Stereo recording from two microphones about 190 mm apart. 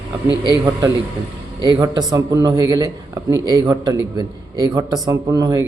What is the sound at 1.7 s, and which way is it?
Speech, 20° right (ahead or behind).